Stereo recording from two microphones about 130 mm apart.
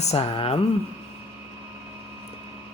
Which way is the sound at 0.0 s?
55° left (ahead or behind).